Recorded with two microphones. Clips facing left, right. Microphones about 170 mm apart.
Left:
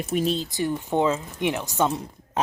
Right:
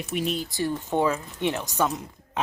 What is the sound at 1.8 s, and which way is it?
Speech, 25° left (ahead or behind).